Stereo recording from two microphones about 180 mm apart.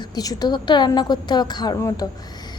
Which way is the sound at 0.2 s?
20° left (ahead or behind).